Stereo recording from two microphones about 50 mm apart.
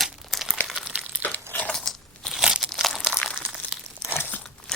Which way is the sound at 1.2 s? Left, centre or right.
Left.